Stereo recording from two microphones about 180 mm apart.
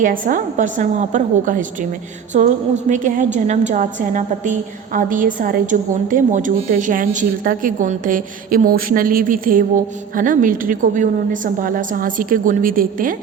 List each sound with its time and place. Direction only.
0.0 s a woman's voice: 45° right (ahead or behind)